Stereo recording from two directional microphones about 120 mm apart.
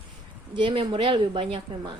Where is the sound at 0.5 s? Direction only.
45° right (ahead or behind).